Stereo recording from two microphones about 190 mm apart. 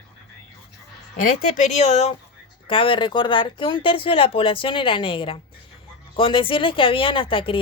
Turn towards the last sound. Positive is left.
turn(degrees=25)  # may be behind; listen again after turning